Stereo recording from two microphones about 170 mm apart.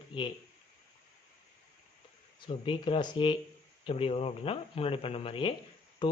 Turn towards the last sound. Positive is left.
turn(degrees=30)  # may be behind; listen again after turning